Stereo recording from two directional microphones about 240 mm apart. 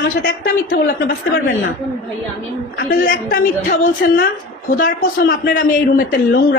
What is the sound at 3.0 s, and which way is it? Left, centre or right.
A man's voice, left.